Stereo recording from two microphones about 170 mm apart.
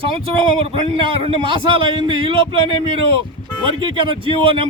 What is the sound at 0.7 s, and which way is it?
A man's voice, 30° right (ahead or behind).